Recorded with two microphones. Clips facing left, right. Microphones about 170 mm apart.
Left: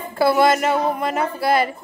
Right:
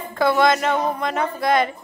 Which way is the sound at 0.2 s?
5° left (ahead or behind).